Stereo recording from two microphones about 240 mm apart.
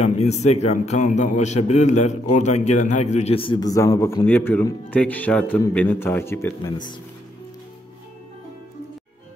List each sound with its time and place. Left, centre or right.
0.0 s a man's voice: left